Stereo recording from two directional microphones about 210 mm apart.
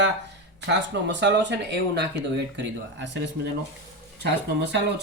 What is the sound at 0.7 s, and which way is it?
Speech, 55° right (ahead or behind).